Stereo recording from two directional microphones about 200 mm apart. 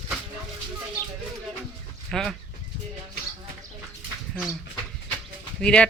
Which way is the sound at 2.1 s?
Centre (ahead or behind).